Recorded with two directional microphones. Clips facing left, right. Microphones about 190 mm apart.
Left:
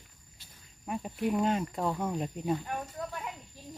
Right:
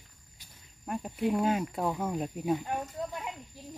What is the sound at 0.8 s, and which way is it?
Speech, centre (ahead or behind).